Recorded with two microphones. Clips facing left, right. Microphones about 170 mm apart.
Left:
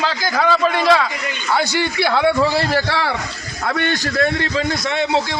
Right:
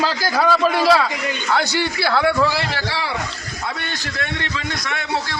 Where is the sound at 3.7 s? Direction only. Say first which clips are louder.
Left 11 dB; 60° left (ahead or behind).